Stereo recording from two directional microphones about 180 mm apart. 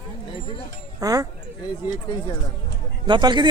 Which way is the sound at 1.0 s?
20° right (ahead or behind).